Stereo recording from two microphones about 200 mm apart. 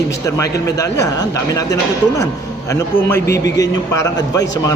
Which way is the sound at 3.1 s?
15° left (ahead or behind).